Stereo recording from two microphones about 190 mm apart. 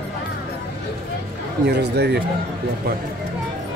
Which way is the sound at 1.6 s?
60° right (ahead or behind).